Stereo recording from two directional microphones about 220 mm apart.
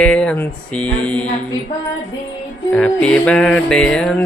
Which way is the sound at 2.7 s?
5° left (ahead or behind).